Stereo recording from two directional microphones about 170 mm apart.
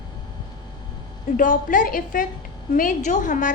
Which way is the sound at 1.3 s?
50° left (ahead or behind).